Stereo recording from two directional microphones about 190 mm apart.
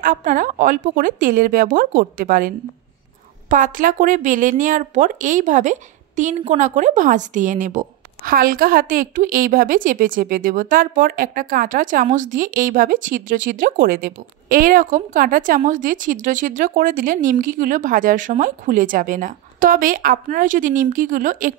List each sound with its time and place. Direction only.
0.0 s a woman's voice: 45° right (ahead or behind)